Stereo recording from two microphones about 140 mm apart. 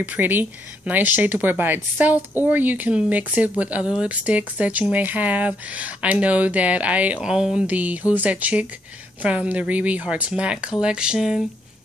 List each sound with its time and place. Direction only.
0.0 s speech: 10° right (ahead or behind)